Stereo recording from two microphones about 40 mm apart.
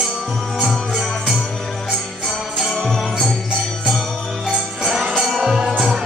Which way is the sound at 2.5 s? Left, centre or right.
Centre.